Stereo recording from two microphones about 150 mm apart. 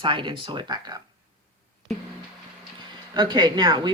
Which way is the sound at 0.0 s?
35° right (ahead or behind).